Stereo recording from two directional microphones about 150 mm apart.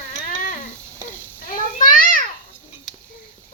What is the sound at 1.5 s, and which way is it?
Cat, 65° left (ahead or behind).